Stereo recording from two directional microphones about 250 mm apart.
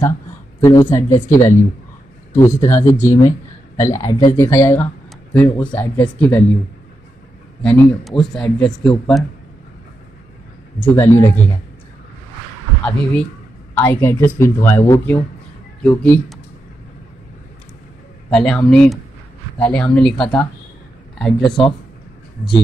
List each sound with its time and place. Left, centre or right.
0.7 s speech: centre
2.3 s speech: centre
7.6 s speech: centre
10.8 s speech: centre
12.8 s speech: centre
18.3 s speech: centre
21.5 s speech: centre